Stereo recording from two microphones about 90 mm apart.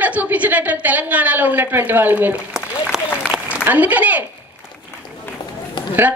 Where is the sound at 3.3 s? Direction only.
15° right (ahead or behind).